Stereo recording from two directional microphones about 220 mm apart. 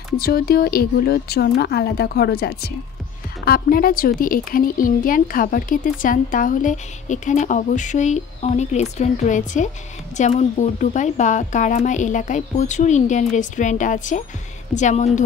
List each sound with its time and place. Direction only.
0.2 s a woman's voice: 45° left (ahead or behind)